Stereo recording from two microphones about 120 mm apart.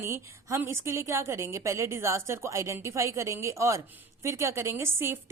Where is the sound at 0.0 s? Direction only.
20° right (ahead or behind).